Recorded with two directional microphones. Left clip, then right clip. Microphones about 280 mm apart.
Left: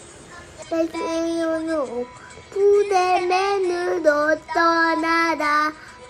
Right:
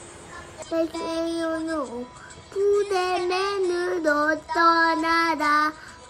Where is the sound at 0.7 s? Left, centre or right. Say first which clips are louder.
Left 3 dB; centre.